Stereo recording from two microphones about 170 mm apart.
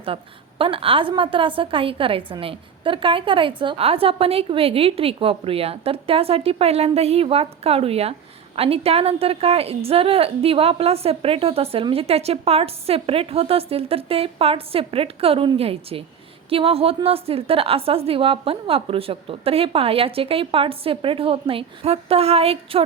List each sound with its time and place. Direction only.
0.6 s a woman's voice: 30° right (ahead or behind)